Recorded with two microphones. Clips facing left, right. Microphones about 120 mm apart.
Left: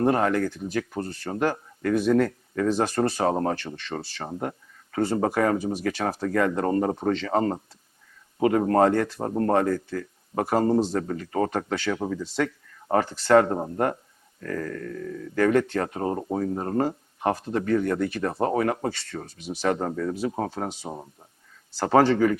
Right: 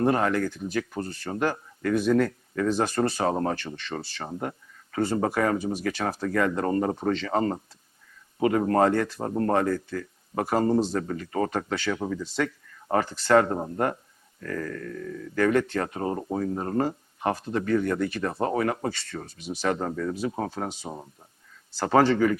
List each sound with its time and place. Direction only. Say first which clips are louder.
0.0 s speech: left 1 dB; 40° left (ahead or behind)
4.3 s speech: left 2 dB; 25° left (ahead or behind)
5.5 s speech: left 1 dB; 20° left (ahead or behind)
5.8 s speech: left 1 dB; 40° left (ahead or behind)
9.1 s speech: left 2 dB; 25° left (ahead or behind)
17.7 s speech: left 1 dB; 35° left (ahead or behind); by 21.1 s 20° left (ahead or behind)
21.8 s speech: left 1 dB; 35° left (ahead or behind)